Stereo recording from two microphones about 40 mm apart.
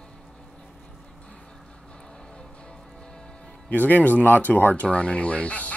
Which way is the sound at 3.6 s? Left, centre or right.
Left.